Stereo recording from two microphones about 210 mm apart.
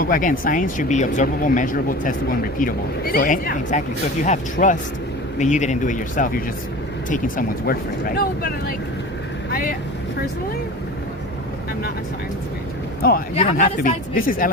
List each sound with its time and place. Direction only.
0.0 s speech: 40° left (ahead or behind)
13.0 s speech: 45° left (ahead or behind)
13.3 s speech: 35° left (ahead or behind)